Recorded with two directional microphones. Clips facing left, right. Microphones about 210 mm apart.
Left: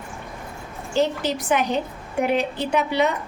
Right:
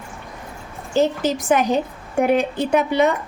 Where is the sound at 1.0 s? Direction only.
45° right (ahead or behind).